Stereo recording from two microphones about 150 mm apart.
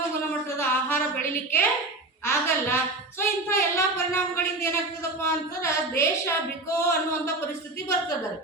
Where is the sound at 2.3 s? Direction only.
15° left (ahead or behind).